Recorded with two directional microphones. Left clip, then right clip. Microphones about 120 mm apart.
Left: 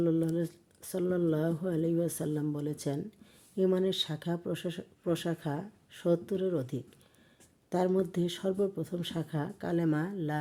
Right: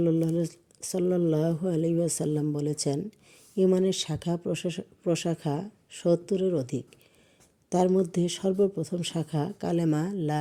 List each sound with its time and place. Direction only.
0.0 s speech: 35° right (ahead or behind)